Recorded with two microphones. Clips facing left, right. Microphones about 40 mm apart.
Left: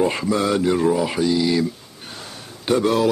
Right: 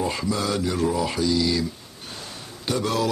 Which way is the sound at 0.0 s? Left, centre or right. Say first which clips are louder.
Left 6 dB; left.